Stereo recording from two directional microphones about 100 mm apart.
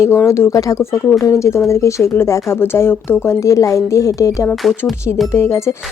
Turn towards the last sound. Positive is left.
turn(degrees=30)  # may be behind; listen again after turning